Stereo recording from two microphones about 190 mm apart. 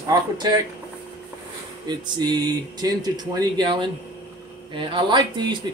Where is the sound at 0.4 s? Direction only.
20° right (ahead or behind).